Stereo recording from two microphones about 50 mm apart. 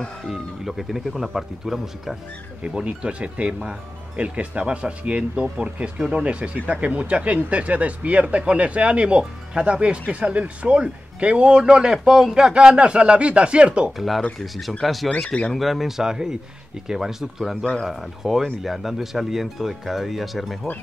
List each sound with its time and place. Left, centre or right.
0.3 s speech: centre
2.6 s speech: centre
13.9 s speech: centre
15.0 s speech: centre
15.5 s speech: centre
16.0 s speech: centre